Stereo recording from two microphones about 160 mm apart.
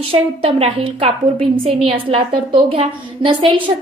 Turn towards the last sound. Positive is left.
turn(degrees=-30)  # may be behind; listen again after turning